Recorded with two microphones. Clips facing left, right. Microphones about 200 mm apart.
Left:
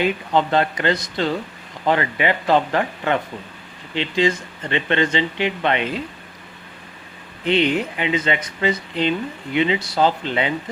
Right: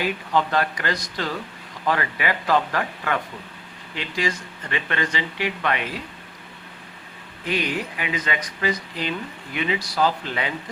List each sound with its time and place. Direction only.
0.0 s speech: 25° left (ahead or behind)
7.4 s speech: 25° left (ahead or behind)